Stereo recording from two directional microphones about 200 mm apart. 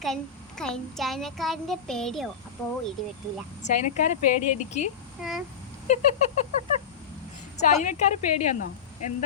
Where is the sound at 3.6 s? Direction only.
35° left (ahead or behind).